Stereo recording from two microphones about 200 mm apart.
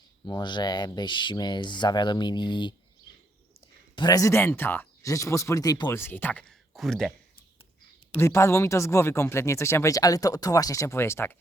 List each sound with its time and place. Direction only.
0.3 s speech: 20° left (ahead or behind)
3.9 s speech: 20° left (ahead or behind); by 7.1 s centre (ahead or behind)
8.1 s speech: 15° left (ahead or behind)